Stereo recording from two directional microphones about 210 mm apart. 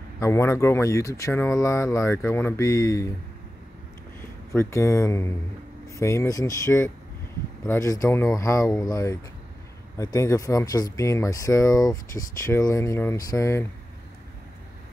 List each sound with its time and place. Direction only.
0.2 s speech: 15° left (ahead or behind)
4.2 s speech: 10° left (ahead or behind)